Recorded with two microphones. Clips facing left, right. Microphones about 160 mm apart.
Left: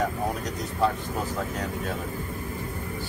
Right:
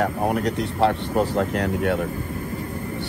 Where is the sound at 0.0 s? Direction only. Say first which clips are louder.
Right 6 dB; 70° right (ahead or behind).